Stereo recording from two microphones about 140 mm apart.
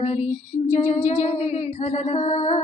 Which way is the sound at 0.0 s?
55° left (ahead or behind).